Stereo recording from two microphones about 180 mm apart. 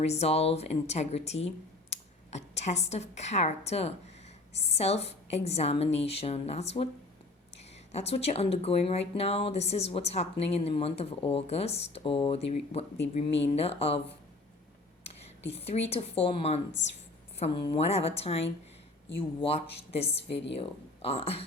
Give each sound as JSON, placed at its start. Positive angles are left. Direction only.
{"t": 0.0, "sound": "a woman's voice", "side_deg": 35}
{"t": 7.9, "sound": "a woman's voice", "side_deg": 35}
{"t": 15.0, "sound": "a sound", "side_deg": 35}
{"t": 15.9, "sound": "a woman's voice", "side_deg": 35}
{"t": 16.8, "sound": "a woman's voice", "side_deg": 90}
{"t": 17.4, "sound": "a woman's voice", "side_deg": 35}